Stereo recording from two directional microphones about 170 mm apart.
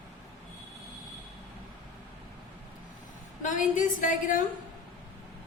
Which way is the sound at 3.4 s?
50° left (ahead or behind).